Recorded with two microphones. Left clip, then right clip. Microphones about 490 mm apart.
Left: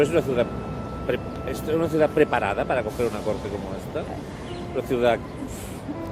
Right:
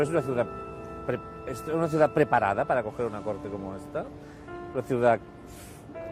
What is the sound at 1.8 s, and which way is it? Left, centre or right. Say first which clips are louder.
A man's voice: left 3 dB; right.